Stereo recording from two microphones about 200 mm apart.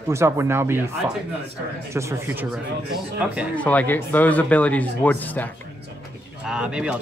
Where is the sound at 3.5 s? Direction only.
5° left (ahead or behind).